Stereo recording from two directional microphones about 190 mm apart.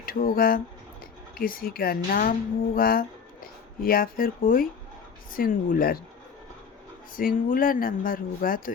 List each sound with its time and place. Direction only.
0.0 s speech: 50° left (ahead or behind)
7.2 s speech: 45° left (ahead or behind)